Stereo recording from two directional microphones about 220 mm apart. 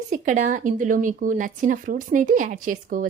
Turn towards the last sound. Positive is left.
turn(degrees=-35)  # may be behind; listen again after turning